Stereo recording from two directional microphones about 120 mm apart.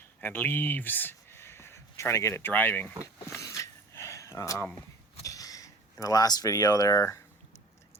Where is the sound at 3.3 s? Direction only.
25° left (ahead or behind).